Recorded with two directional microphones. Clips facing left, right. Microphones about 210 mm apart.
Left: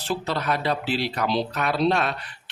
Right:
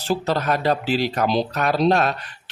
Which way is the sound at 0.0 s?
40° right (ahead or behind).